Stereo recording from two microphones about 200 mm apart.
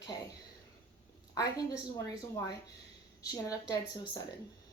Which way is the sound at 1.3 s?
15° left (ahead or behind).